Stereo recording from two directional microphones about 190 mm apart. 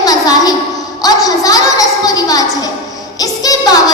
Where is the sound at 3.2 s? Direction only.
20° left (ahead or behind).